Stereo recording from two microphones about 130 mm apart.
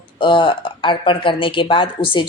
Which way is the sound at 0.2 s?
40° left (ahead or behind).